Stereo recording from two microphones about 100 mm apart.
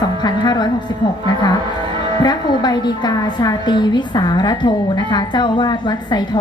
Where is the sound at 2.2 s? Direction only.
45° left (ahead or behind).